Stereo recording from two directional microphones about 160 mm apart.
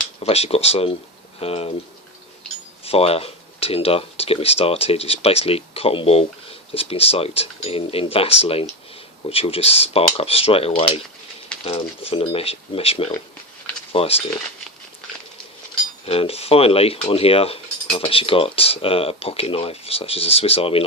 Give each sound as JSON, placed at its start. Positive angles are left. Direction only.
{"t": 0.2, "sound": "speech", "side_deg": 40}
{"t": 2.8, "sound": "speech", "side_deg": 40}
{"t": 16.0, "sound": "speech", "side_deg": 40}